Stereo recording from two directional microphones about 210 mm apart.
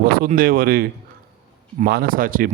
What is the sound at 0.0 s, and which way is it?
Speech, 45° right (ahead or behind).